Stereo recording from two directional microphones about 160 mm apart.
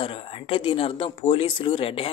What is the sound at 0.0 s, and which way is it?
A man's voice, 35° left (ahead or behind).